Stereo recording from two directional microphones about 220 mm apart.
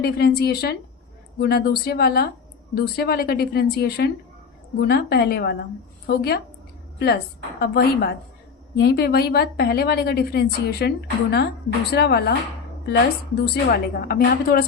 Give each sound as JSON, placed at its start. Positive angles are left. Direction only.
{"t": 0.0, "sound": "a woman's voice", "side_deg": 45}
{"t": 7.6, "sound": "a woman's voice", "side_deg": 45}